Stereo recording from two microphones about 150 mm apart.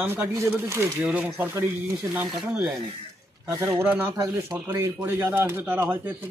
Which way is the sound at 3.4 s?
20° right (ahead or behind).